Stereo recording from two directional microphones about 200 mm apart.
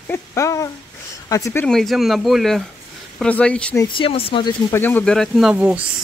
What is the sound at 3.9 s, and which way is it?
Speech, 30° left (ahead or behind).